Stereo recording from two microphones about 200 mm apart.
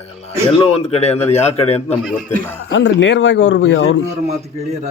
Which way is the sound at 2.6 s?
70° left (ahead or behind).